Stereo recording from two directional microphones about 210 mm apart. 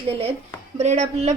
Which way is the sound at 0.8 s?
30° right (ahead or behind).